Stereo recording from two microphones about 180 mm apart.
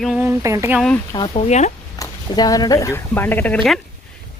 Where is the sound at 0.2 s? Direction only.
15° right (ahead or behind).